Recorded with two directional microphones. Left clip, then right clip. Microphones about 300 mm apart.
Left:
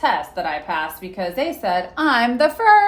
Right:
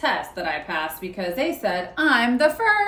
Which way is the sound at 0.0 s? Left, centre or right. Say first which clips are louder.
Left 4 dB; centre.